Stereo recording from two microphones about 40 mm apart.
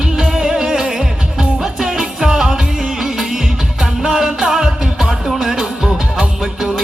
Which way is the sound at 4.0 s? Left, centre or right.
Centre.